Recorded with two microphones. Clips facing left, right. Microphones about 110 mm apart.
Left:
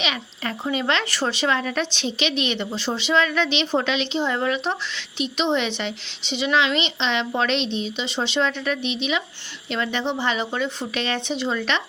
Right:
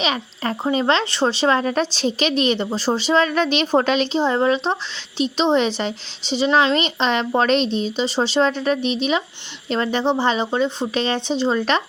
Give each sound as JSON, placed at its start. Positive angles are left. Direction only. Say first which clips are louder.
{"t": 0.0, "sound": "speech", "louder": "right 5 dB", "side_deg": -35}